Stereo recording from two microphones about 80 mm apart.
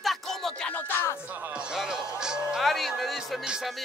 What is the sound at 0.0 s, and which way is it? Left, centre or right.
Music, centre.